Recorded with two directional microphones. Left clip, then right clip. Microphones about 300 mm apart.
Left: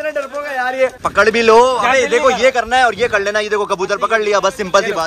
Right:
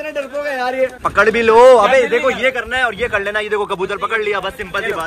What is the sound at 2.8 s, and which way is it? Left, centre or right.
Speech, centre.